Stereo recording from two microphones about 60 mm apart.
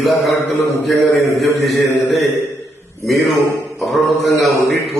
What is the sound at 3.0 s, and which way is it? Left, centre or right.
A man's voice, centre.